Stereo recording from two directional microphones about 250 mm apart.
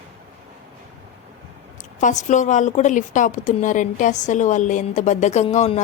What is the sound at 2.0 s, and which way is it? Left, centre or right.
A woman's voice, left.